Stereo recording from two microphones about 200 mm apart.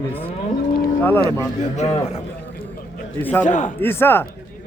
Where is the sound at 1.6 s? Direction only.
35° left (ahead or behind).